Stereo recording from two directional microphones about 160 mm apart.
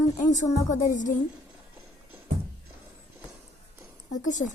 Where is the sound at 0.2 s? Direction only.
50° left (ahead or behind).